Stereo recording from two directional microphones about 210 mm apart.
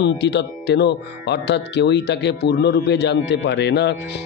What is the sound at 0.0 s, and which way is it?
Speech, 55° left (ahead or behind).